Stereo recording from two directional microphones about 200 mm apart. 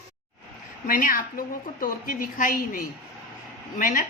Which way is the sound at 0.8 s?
45° left (ahead or behind).